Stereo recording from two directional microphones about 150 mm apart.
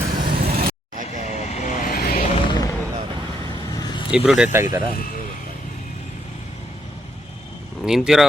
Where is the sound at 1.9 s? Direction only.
80° left.